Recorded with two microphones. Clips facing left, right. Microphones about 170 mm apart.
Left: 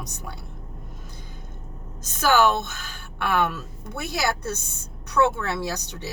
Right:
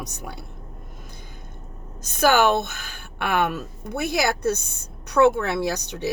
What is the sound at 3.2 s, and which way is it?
Speech, 15° right (ahead or behind).